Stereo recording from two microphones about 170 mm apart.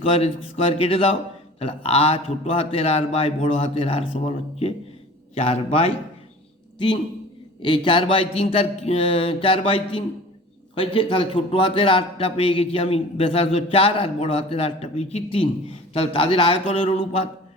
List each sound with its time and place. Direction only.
0.0 s a man's voice: 35° left (ahead or behind)
5.3 s a man's voice: 35° left (ahead or behind)